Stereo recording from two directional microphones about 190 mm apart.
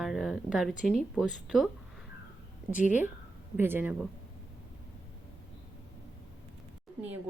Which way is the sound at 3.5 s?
10° right (ahead or behind).